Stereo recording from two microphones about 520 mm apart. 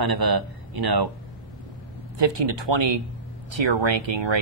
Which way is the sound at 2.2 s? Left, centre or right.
Right.